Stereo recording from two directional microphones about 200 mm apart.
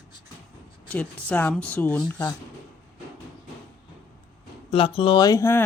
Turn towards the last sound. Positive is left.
turn(degrees=15)  # may be behind; listen again after turning